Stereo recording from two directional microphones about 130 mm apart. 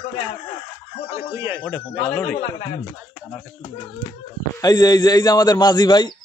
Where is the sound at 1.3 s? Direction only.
15° right (ahead or behind).